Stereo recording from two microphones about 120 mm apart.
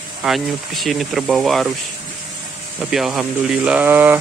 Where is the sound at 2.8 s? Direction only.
5° right (ahead or behind).